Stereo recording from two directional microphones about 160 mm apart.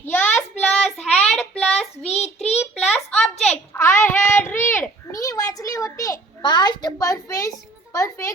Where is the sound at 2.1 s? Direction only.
40° left (ahead or behind).